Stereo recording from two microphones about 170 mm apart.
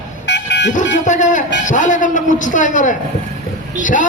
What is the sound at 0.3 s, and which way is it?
Dog, 90° left.